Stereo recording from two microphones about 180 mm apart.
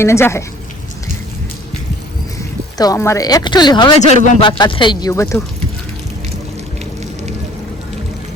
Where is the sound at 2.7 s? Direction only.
20° left (ahead or behind).